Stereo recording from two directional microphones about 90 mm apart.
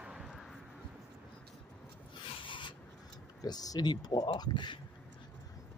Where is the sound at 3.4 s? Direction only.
45° left (ahead or behind).